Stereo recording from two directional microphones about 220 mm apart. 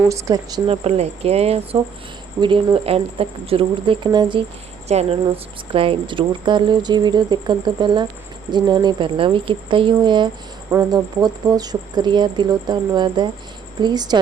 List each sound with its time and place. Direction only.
0.1 s speech: 15° right (ahead or behind)